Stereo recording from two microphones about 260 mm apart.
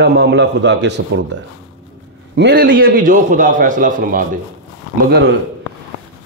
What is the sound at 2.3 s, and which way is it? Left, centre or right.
A man's voice, right.